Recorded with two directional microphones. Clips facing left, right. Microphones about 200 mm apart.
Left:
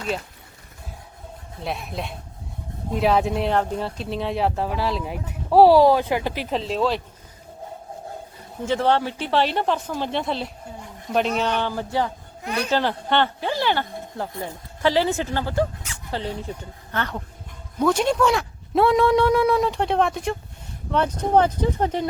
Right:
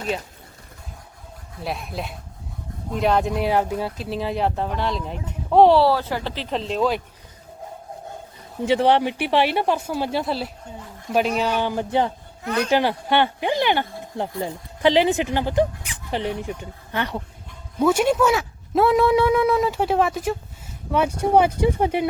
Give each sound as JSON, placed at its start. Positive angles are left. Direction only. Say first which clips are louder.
{"t": 1.6, "sound": "speech", "louder": "even", "side_deg": 0}
{"t": 6.5, "sound": "speech", "louder": "right 1 dB", "side_deg": 0}
{"t": 8.6, "sound": "speech", "louder": "right 3 dB", "side_deg": -15}
{"t": 12.4, "sound": "speech", "louder": "right 3 dB", "side_deg": 15}
{"t": 12.7, "sound": "speech", "louder": "right 2 dB", "side_deg": -10}